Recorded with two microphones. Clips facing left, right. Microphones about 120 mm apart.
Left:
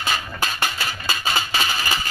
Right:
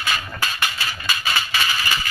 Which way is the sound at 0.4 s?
35° left (ahead or behind).